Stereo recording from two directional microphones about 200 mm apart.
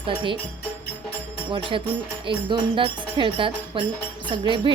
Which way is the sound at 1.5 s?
25° right (ahead or behind).